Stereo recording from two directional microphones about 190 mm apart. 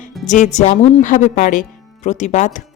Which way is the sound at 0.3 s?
40° left (ahead or behind).